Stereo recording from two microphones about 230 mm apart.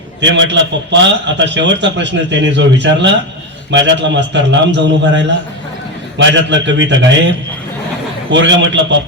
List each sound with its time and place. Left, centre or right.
0.2 s a man's voice: right